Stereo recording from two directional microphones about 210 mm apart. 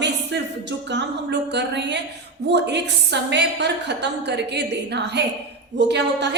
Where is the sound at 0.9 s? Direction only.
55° right (ahead or behind).